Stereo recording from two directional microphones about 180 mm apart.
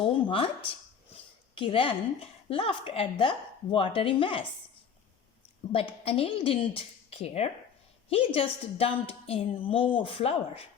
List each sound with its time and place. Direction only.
0.0 s a sound: 30° left (ahead or behind)
2.5 s a woman's voice: 30° left (ahead or behind)
5.7 s a woman's voice: 30° left (ahead or behind)